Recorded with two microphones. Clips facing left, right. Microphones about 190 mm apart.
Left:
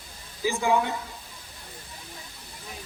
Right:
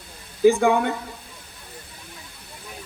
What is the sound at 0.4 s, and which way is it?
Speech, 60° right (ahead or behind).